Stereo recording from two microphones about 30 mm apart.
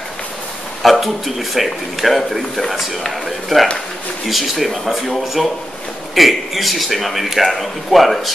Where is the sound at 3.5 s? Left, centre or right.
Left.